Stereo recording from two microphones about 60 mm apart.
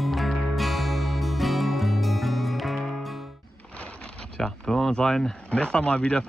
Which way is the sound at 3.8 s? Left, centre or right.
Centre.